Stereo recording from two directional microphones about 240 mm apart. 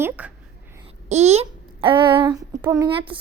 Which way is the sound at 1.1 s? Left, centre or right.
Right.